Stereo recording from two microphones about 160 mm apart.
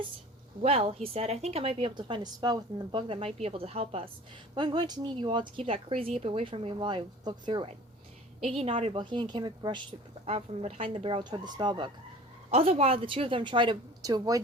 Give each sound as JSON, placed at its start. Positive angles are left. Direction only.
{"t": 0.6, "sound": "speech", "side_deg": -40}
{"t": 4.5, "sound": "speech", "side_deg": -30}
{"t": 8.5, "sound": "a woman's voice", "side_deg": -40}
{"t": 10.2, "sound": "speech", "side_deg": -40}
{"t": 12.5, "sound": "speech", "side_deg": -40}